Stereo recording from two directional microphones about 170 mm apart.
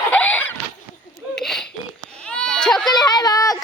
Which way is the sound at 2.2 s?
5° left (ahead or behind).